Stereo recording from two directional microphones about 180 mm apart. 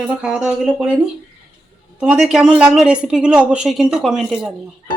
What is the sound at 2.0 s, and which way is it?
Speech, 5° right (ahead or behind).